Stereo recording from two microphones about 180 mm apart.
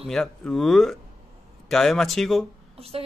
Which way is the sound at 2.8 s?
35° right (ahead or behind).